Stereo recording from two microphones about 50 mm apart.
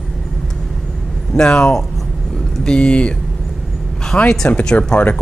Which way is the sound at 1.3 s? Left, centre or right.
Left.